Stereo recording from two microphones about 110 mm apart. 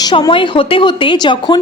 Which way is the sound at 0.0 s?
40° left (ahead or behind).